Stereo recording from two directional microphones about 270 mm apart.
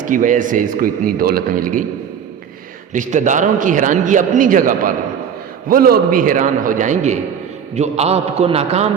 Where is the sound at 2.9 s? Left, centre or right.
Right.